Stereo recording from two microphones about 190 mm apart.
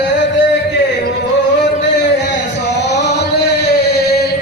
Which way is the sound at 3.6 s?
55° left (ahead or behind).